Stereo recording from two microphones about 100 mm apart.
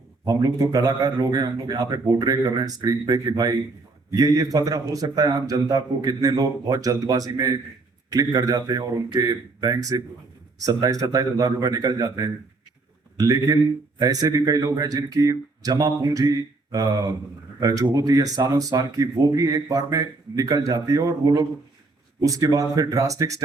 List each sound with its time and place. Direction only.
0.3 s speech: 35° right (ahead or behind)